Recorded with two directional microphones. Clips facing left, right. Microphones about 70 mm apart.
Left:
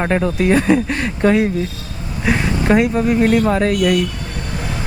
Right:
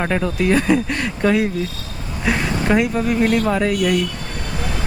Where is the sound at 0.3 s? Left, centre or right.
Centre.